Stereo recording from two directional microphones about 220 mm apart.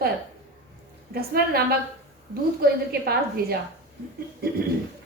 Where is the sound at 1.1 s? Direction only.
45° right (ahead or behind).